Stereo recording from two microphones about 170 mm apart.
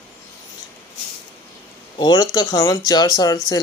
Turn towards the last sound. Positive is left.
turn(degrees=20)  # may be behind; listen again after turning